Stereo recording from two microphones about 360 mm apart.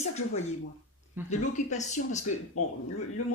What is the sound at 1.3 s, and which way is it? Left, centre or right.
Speech, centre.